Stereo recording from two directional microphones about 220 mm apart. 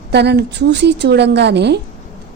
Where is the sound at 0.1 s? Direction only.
50° right (ahead or behind).